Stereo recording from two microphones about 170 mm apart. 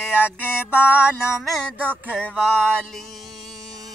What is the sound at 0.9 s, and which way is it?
Music, 5° right (ahead or behind).